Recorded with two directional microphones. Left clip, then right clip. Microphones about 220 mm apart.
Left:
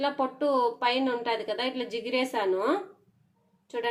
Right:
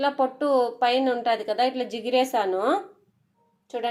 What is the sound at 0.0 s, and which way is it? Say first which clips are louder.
A woman's voice: right 4 dB; 25° right (ahead or behind).